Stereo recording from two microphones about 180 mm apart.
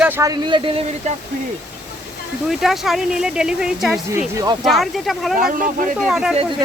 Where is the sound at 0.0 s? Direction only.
15° right (ahead or behind).